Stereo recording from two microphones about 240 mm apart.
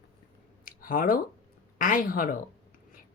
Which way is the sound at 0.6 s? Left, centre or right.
Left.